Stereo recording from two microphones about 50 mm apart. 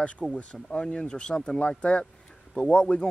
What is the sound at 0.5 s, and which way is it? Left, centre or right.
Speech, centre.